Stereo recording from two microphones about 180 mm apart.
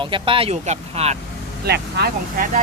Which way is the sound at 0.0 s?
30° right (ahead or behind).